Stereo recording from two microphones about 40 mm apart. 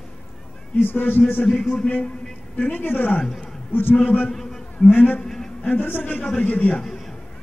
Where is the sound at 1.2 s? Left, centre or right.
Left.